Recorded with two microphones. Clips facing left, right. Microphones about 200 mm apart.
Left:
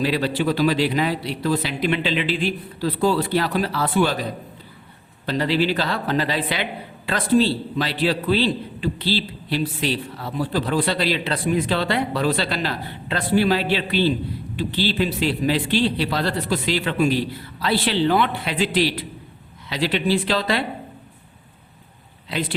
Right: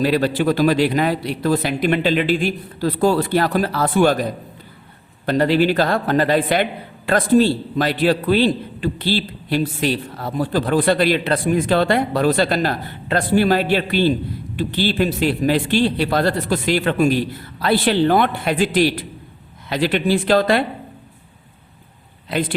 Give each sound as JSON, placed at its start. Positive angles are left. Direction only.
{"t": 0.0, "sound": "a man's voice", "side_deg": -50}
{"t": 22.3, "sound": "speech", "side_deg": -50}